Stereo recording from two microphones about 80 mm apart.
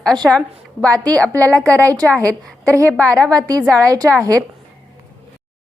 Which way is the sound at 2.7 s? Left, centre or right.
Right.